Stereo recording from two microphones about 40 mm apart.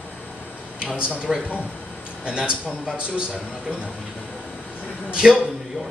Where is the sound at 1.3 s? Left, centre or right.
Centre.